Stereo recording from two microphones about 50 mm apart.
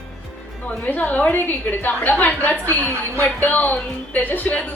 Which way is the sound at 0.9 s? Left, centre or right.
Left.